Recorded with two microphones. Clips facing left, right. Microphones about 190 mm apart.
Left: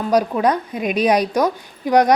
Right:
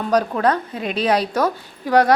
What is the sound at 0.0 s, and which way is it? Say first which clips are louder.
A woman's voice: left 1 dB; 10° left (ahead or behind).